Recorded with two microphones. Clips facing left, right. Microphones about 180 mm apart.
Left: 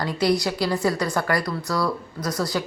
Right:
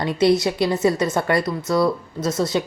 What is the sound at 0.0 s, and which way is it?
A woman's voice, 20° right (ahead or behind).